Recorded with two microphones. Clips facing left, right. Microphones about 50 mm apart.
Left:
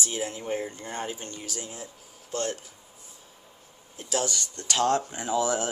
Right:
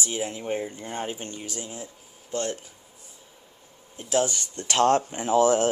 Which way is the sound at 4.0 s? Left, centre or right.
Right.